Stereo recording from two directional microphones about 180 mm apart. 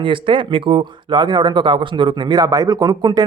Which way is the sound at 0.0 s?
30° right (ahead or behind).